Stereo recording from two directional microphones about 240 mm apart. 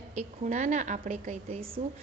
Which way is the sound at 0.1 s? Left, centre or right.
Right.